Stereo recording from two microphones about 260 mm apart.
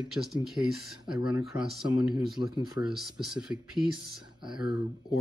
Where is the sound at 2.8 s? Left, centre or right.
Left.